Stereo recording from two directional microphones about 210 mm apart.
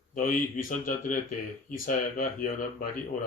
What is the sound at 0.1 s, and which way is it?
Speech, 40° left (ahead or behind).